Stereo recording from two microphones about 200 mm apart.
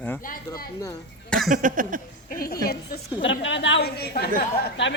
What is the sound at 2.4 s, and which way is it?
A woman's voice, 50° left (ahead or behind).